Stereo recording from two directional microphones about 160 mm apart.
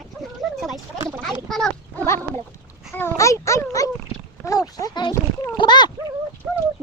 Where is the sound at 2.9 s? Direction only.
15° left (ahead or behind).